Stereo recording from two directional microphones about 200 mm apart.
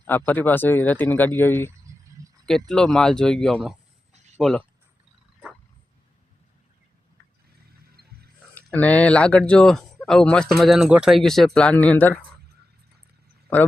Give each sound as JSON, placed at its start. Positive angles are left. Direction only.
{"t": 0.1, "sound": "speech", "side_deg": 10}
{"t": 8.5, "sound": "speech", "side_deg": 10}